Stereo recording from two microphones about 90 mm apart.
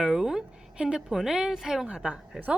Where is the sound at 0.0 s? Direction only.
5° right (ahead or behind).